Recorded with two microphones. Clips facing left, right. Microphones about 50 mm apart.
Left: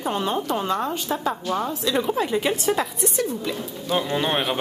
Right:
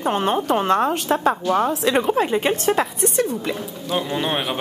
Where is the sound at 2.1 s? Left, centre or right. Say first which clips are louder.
Right 3 dB; right.